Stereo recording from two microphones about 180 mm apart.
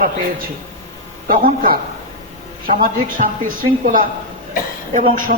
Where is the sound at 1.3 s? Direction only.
50° right (ahead or behind).